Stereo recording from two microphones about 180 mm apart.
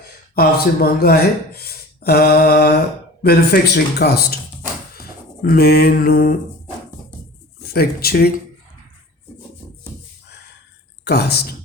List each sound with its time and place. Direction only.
0.3 s speech: 55° left (ahead or behind)
5.4 s speech: 55° left (ahead or behind)
7.6 s speech: 60° left (ahead or behind)
11.0 s speech: 65° left (ahead or behind)